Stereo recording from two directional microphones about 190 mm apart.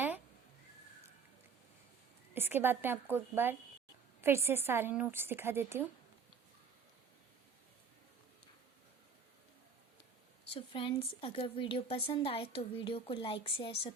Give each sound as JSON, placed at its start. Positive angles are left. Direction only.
{"t": 2.3, "sound": "a woman's voice", "side_deg": -10}
{"t": 10.5, "sound": "a woman's voice", "side_deg": 25}